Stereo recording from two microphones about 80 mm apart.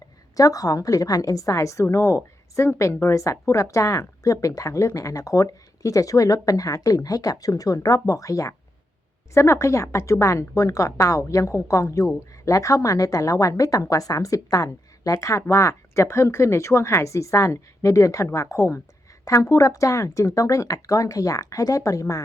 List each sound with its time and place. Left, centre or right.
0.3 s a woman's voice: left